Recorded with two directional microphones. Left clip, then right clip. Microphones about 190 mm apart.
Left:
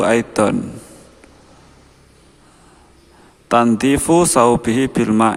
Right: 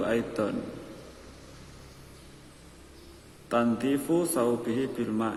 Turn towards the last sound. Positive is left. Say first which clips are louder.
# left 15 dB
turn(degrees=45)  # may be behind; listen again after turning